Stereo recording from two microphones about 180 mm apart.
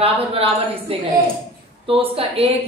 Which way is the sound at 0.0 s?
30° right (ahead or behind).